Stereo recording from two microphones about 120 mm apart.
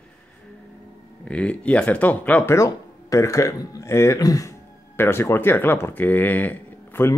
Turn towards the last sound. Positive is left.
turn(degrees=15)  # may be behind; listen again after turning